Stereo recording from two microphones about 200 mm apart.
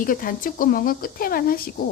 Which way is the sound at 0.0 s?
45° left (ahead or behind).